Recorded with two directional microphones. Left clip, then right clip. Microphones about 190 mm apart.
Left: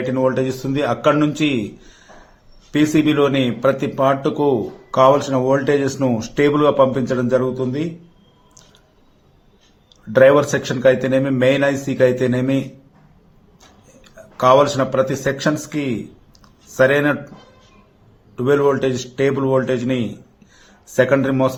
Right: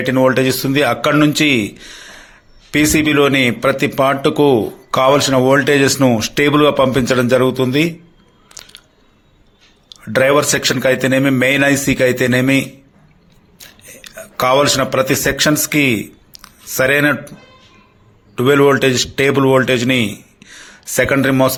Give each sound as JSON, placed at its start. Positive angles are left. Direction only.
{"t": 0.1, "sound": "speech", "side_deg": -15}
{"t": 2.7, "sound": "a man's voice", "side_deg": -15}
{"t": 9.9, "sound": "speech", "side_deg": -15}
{"t": 14.0, "sound": "speech", "side_deg": -15}
{"t": 16.3, "sound": "a sound", "side_deg": -20}
{"t": 18.3, "sound": "speech", "side_deg": -20}